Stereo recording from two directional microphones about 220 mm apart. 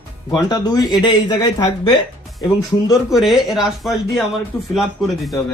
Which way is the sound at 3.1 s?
Centre (ahead or behind).